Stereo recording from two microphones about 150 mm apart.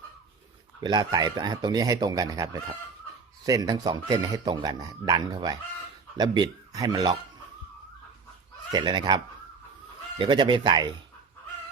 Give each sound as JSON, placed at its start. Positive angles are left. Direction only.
{"t": 0.8, "sound": "speech", "side_deg": -30}
{"t": 8.7, "sound": "speech", "side_deg": -30}